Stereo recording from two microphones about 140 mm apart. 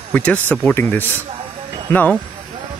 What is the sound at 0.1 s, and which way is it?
Speech, 10° left (ahead or behind).